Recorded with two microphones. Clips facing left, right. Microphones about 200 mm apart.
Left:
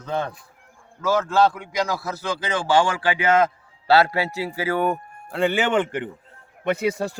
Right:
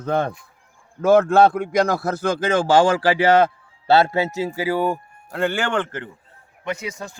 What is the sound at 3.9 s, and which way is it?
Speech, 25° right (ahead or behind).